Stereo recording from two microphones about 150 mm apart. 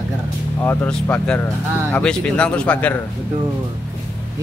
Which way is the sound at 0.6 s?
15° left (ahead or behind).